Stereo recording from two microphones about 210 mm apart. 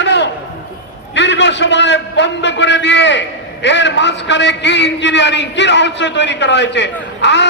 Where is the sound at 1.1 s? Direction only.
60° left (ahead or behind).